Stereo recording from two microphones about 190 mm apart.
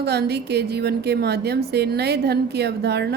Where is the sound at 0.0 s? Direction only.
60° right (ahead or behind).